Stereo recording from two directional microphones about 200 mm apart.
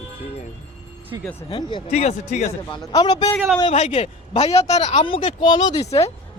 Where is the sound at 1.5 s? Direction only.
30° left (ahead or behind).